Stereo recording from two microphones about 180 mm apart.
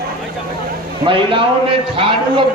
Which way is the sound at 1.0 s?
30° right (ahead or behind).